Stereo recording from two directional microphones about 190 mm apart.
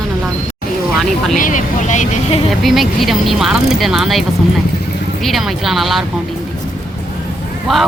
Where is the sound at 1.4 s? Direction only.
40° left (ahead or behind).